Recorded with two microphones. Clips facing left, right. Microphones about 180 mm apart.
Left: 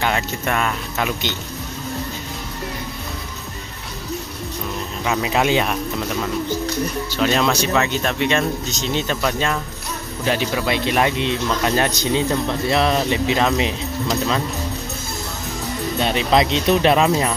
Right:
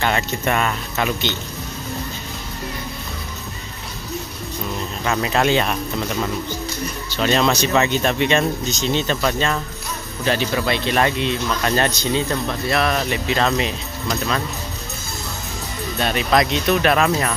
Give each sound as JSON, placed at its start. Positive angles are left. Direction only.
{"t": 0.0, "sound": "speech", "side_deg": 0}
{"t": 5.0, "sound": "speech", "side_deg": 5}
{"t": 7.1, "sound": "speech", "side_deg": 5}
{"t": 16.0, "sound": "speech", "side_deg": 20}